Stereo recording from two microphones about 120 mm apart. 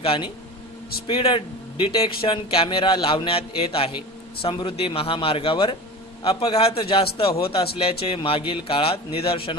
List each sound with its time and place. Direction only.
0.0 s a man's voice: 50° left (ahead or behind)